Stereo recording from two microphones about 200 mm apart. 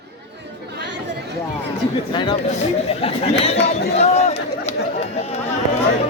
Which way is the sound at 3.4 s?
30° left (ahead or behind).